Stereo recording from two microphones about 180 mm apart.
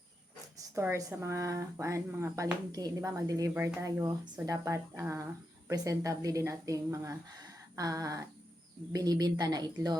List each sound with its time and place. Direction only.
0.8 s a woman's voice: 15° right (ahead or behind)